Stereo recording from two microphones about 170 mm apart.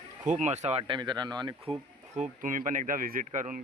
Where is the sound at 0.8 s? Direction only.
25° right (ahead or behind).